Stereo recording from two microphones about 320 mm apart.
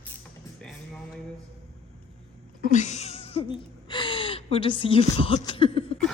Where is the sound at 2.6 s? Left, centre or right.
Left.